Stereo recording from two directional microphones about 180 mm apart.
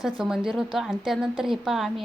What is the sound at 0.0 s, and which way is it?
Speech, 5° right (ahead or behind).